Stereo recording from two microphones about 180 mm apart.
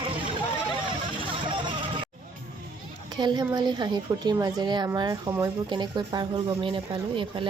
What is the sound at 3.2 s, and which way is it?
Speech, 25° right (ahead or behind).